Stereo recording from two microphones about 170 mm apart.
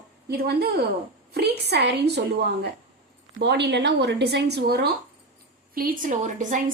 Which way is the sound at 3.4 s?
90° right.